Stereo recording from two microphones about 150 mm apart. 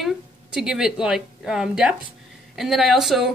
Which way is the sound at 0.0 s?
5° right (ahead or behind).